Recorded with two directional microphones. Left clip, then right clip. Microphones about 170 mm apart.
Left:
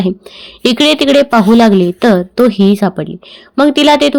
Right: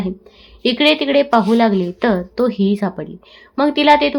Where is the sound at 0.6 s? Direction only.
40° left (ahead or behind).